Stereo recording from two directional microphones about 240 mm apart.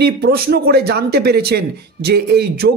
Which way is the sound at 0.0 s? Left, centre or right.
Right.